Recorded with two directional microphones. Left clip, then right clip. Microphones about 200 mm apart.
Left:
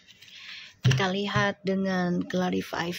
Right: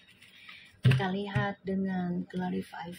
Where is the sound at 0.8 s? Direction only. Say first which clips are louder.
Left 5 dB; 25° left (ahead or behind).